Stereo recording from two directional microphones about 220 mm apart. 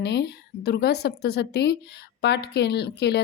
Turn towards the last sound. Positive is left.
turn(degrees=50)  # may be behind; listen again after turning